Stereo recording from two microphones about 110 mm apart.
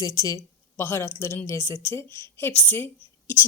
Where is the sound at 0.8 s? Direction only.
20° left (ahead or behind).